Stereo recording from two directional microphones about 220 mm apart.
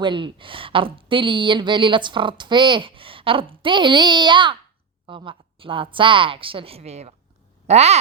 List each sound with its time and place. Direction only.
0.0 s a woman's voice: 20° right (ahead or behind)